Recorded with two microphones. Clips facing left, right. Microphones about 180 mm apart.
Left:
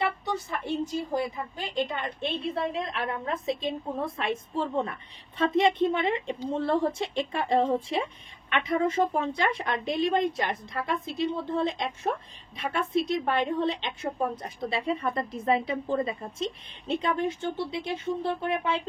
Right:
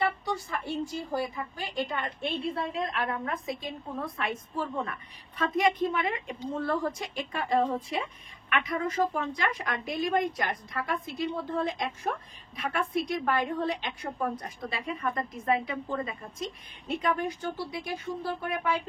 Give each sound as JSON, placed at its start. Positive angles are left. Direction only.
{"t": 0.2, "sound": "a woman's voice", "side_deg": 20}